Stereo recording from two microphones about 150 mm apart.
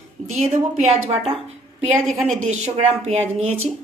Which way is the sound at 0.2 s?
45° right (ahead or behind).